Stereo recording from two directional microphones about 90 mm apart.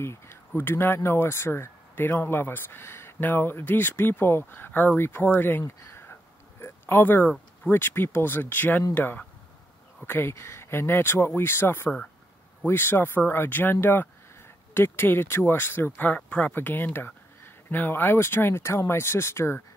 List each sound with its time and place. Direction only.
0.0 s speech: 30° left (ahead or behind)